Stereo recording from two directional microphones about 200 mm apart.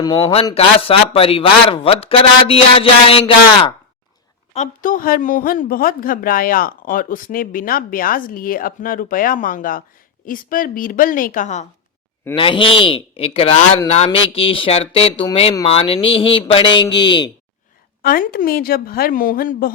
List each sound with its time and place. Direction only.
0.0 s speech: 20° left (ahead or behind)
4.5 s speech: 40° left (ahead or behind)
12.4 s speech: 25° left (ahead or behind)
18.0 s speech: 45° left (ahead or behind)